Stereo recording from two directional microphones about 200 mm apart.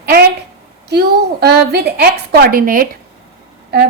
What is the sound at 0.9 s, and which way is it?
A woman's voice, 55° right (ahead or behind).